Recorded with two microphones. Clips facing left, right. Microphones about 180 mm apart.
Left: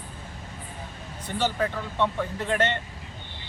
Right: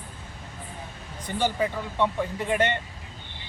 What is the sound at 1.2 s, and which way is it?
A man's voice, 10° right (ahead or behind).